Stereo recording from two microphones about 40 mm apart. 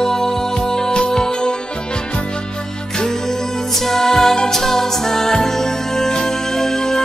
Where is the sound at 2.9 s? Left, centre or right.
Centre.